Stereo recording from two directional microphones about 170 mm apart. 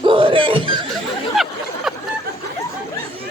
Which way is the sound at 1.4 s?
Centre (ahead or behind).